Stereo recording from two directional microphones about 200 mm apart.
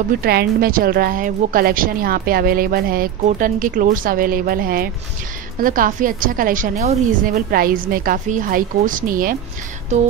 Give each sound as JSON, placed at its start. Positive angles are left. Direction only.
{"t": 0.2, "sound": "a woman's voice", "side_deg": -50}